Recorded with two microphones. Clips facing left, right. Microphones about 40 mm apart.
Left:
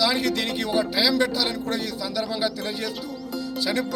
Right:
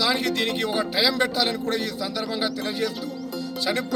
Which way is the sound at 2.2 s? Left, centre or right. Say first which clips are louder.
Left 1 dB; right.